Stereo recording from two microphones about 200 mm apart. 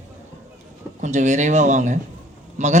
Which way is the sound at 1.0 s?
35° right (ahead or behind).